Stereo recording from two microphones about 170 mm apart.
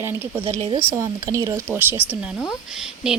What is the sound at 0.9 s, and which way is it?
A woman's voice, 20° right (ahead or behind).